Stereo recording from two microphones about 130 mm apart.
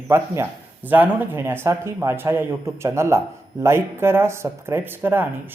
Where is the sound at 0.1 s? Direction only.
20° right (ahead or behind).